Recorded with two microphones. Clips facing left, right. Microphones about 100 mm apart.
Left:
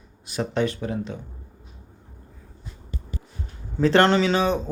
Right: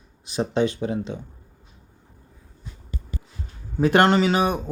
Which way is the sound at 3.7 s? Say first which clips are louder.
Even; 10° right (ahead or behind).